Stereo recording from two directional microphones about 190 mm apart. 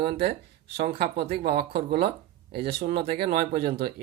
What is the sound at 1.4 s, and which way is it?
Speech, 55° right (ahead or behind).